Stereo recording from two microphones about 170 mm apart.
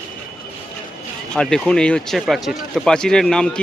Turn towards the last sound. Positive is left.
turn(degrees=5)  # may be behind; listen again after turning